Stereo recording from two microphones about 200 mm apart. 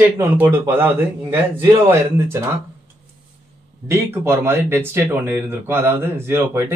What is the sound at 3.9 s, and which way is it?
Speech, 10° right (ahead or behind).